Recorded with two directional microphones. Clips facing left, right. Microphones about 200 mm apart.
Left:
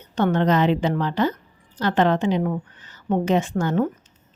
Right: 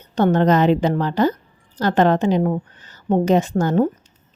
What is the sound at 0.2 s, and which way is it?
A woman's voice, 40° right (ahead or behind).